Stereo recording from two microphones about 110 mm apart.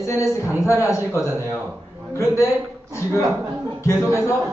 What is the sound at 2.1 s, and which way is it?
Speech, 25° left (ahead or behind).